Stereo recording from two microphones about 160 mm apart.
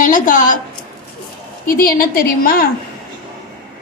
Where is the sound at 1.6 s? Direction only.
65° left (ahead or behind).